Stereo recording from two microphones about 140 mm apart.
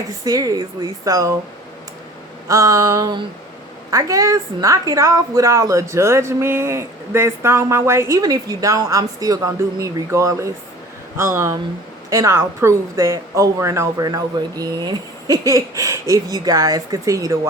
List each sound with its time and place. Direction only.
0.3 s a woman's voice: 25° right (ahead or behind)
2.5 s a woman's voice: 25° right (ahead or behind)
12.1 s a woman's voice: 20° right (ahead or behind)